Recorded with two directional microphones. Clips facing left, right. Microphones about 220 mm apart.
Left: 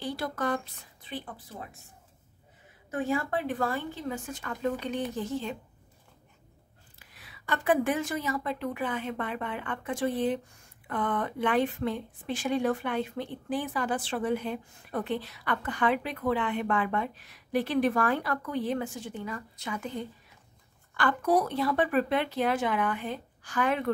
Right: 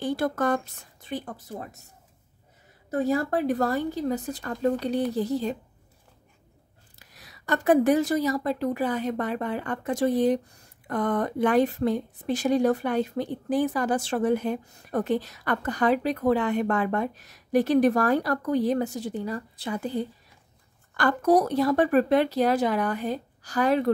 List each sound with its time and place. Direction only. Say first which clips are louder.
0.0 s speech: right 6 dB; 50° right (ahead or behind)
2.9 s a woman's voice: right 5 dB; 40° right (ahead or behind)
7.0 s a woman's voice: right 3 dB; 40° right (ahead or behind)